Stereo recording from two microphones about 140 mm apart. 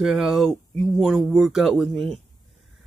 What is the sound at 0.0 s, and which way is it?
A man's voice, 5° right (ahead or behind).